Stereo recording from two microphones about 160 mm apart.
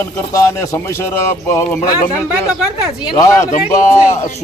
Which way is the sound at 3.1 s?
20° left (ahead or behind).